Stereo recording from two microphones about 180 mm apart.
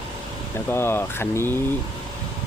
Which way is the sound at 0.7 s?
15° left (ahead or behind).